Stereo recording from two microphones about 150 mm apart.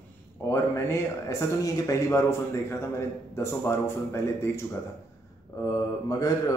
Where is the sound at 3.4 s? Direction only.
20° left (ahead or behind).